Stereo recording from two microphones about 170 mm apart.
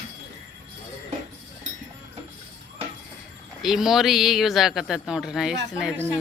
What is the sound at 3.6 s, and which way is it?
A woman's voice, centre (ahead or behind).